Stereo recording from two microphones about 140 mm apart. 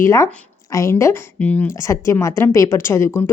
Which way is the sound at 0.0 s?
20° left (ahead or behind).